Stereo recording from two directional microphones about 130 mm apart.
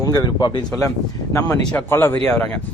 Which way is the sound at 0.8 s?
20° left (ahead or behind).